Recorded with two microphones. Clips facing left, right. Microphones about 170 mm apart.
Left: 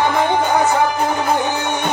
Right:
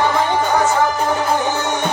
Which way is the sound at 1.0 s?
60° left (ahead or behind).